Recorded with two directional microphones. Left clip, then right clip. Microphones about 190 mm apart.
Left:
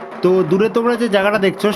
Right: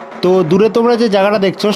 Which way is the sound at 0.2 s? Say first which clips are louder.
Right 3 dB; 30° right (ahead or behind).